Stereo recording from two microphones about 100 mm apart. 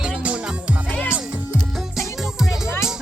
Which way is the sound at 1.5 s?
Centre (ahead or behind).